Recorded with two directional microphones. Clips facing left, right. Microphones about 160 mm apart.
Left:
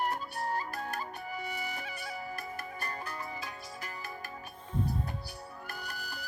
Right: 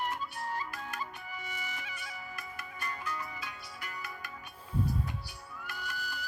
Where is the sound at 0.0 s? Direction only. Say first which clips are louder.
Left 3 dB; 40° left (ahead or behind).